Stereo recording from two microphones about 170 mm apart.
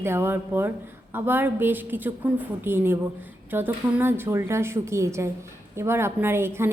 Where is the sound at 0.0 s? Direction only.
15° right (ahead or behind).